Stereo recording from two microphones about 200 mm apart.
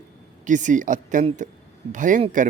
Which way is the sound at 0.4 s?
40° right (ahead or behind).